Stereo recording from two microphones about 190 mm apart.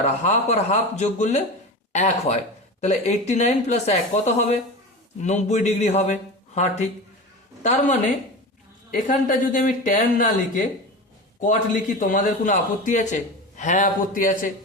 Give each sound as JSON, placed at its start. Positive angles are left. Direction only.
{"t": 0.0, "sound": "speech", "side_deg": 35}
{"t": 8.9, "sound": "a man's voice", "side_deg": 45}